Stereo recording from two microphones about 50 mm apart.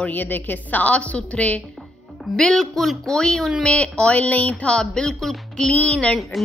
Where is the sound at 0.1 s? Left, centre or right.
Left.